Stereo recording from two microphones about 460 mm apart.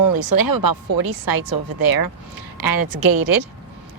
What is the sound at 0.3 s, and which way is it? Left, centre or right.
Speech, right.